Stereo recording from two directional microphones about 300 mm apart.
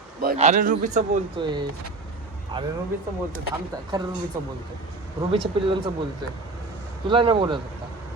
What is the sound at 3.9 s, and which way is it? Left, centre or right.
Speech, centre.